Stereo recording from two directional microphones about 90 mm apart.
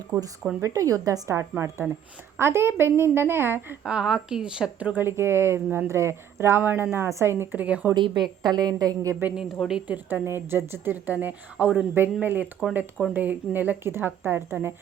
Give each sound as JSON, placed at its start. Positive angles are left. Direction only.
{"t": 0.1, "sound": "a woman's voice", "side_deg": -40}
{"t": 3.8, "sound": "a woman's voice", "side_deg": -5}
{"t": 7.6, "sound": "speech", "side_deg": -15}
{"t": 7.9, "sound": "a woman's voice", "side_deg": -60}
{"t": 9.6, "sound": "a woman's voice", "side_deg": -10}